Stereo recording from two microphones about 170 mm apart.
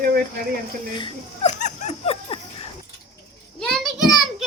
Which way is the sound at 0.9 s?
30° left (ahead or behind).